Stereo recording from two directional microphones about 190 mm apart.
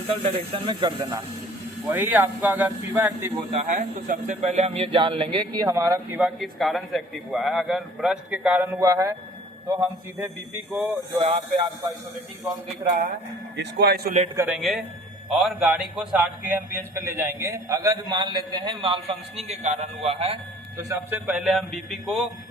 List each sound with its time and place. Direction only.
0.1 s a man's voice: 30° right (ahead or behind)
1.9 s speech: 10° right (ahead or behind)
3.5 s speech: 40° right (ahead or behind); by 10.3 s 10° right (ahead or behind)
11.2 s speech: 30° right (ahead or behind)
13.6 s a man's voice: 60° right (ahead or behind)
14.3 s a man's voice: 10° right (ahead or behind); by 20.4 s 30° right (ahead or behind)
20.7 s a man's voice: 10° right (ahead or behind)